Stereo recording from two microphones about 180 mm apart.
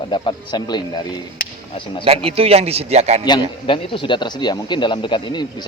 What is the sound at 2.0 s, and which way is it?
A man's voice, 35° right (ahead or behind).